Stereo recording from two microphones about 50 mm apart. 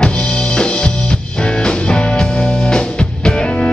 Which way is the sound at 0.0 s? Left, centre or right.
Centre.